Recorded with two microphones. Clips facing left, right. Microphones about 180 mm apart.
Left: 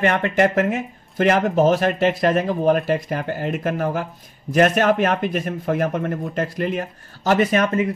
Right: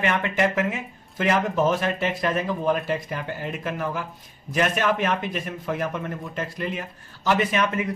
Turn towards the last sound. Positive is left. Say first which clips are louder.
# left 5 dB
turn(degrees=40)  # may be behind; listen again after turning